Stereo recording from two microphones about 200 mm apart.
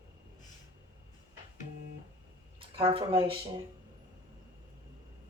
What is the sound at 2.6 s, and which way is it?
Speech, 25° right (ahead or behind).